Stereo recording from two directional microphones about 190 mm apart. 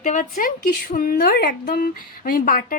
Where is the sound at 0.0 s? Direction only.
40° left (ahead or behind).